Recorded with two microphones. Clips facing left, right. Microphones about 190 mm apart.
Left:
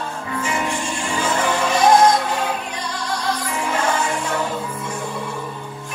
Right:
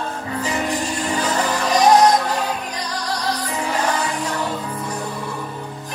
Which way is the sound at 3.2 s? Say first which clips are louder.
Left 1 dB; 35° right (ahead or behind).